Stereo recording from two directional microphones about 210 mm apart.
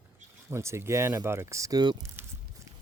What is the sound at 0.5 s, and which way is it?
Speech, 15° right (ahead or behind).